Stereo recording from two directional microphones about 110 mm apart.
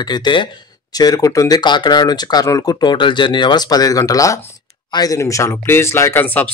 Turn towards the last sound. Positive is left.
turn(degrees=15)  # may be behind; listen again after turning